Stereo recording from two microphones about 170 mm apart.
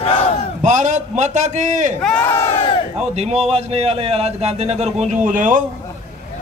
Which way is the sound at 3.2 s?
40° right (ahead or behind).